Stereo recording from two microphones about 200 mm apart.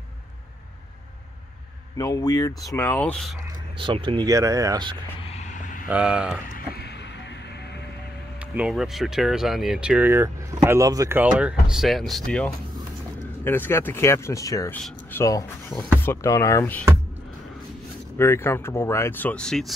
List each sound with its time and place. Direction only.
2.0 s speech: 15° left (ahead or behind)
3.7 s speech: 25° right (ahead or behind)
5.2 s vehicle: 35° left (ahead or behind)
5.9 s speech: 5° right (ahead or behind)
6.5 s music: 55° left (ahead or behind)
8.4 s speech: 5° right (ahead or behind); by 16.8 s 15° left (ahead or behind)
18.1 s speech: 10° left (ahead or behind)